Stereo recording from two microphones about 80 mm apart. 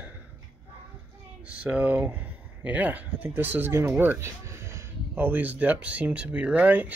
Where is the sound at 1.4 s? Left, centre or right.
Centre.